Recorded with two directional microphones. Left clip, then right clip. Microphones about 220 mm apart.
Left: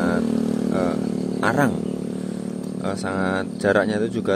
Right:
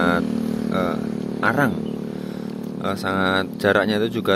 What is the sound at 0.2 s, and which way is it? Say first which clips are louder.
Vehicle: left 2 dB; 50° left (ahead or behind).